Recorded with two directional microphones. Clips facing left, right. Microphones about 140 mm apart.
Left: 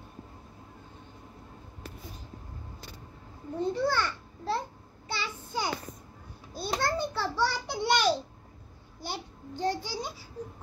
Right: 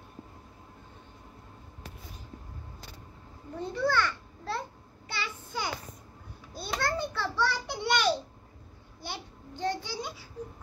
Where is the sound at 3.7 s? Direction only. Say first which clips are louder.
Right 2 dB; 30° left (ahead or behind).